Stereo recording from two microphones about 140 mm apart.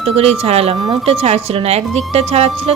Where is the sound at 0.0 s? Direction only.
45° right (ahead or behind).